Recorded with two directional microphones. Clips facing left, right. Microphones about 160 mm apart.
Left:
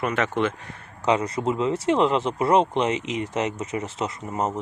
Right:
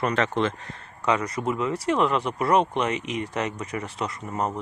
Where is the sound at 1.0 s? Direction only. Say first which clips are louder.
Left 2 dB; 25° left (ahead or behind).